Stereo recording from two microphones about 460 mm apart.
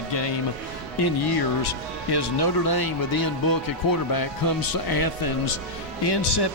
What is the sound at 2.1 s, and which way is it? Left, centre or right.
Speech, left.